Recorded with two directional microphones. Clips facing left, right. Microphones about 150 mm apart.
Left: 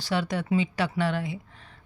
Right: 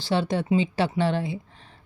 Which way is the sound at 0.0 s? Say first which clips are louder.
Right 3 dB; 30° right (ahead or behind).